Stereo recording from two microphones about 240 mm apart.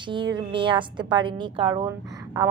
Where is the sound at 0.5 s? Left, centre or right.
Right.